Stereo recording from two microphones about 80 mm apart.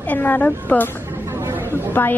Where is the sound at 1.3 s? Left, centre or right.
Right.